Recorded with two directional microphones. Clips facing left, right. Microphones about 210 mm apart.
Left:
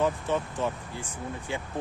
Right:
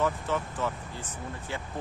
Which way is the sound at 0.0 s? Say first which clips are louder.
Left 2 dB; 20° left (ahead or behind).